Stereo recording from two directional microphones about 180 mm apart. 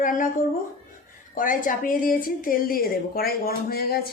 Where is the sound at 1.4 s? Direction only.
50° left (ahead or behind).